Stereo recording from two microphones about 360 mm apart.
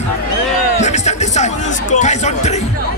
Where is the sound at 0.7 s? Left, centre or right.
Centre.